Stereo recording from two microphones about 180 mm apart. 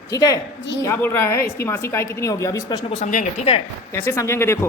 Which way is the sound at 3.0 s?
40° left (ahead or behind).